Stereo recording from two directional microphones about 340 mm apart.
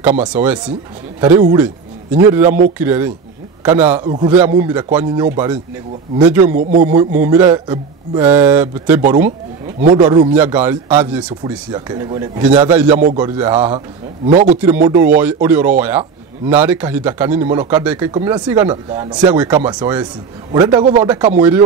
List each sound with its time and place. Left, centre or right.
0.0 s speech: centre
13.0 s speech: centre
13.4 s speech: centre
13.7 s a man's voice: centre
14.9 s speech: centre